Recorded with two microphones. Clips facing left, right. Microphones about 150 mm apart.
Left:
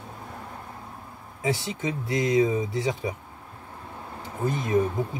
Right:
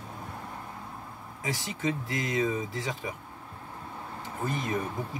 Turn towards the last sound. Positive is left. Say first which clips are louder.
# left 6 dB
turn(degrees=20)  # may be behind; listen again after turning